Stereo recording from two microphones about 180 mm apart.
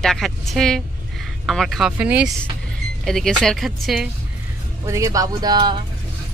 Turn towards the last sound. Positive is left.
turn(degrees=-25)  # may be behind; listen again after turning